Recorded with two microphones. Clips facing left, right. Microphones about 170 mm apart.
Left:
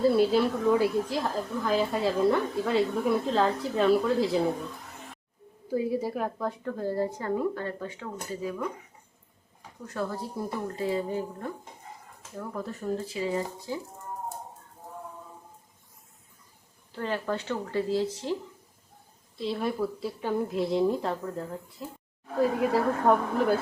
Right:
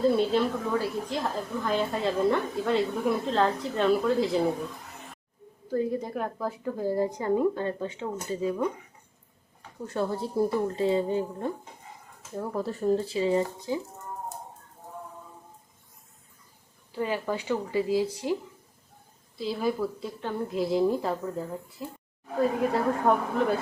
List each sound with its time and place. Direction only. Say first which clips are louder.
0.0 s a woman's voice: left 1 dB; 5° left (ahead or behind)
5.6 s a woman's voice: even; 10° left (ahead or behind); by 8.6 s 25° right (ahead or behind)
9.8 s a woman's voice: right 4 dB; 30° right (ahead or behind)
16.9 s a woman's voice: right 1 dB; 10° right (ahead or behind)
19.4 s a woman's voice: right 1 dB; centre (ahead or behind)